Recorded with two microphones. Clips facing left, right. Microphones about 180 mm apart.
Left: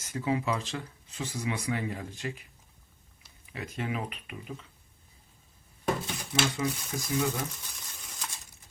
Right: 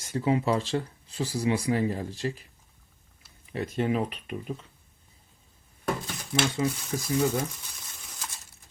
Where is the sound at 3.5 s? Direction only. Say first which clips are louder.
Right 8 dB; 35° right (ahead or behind).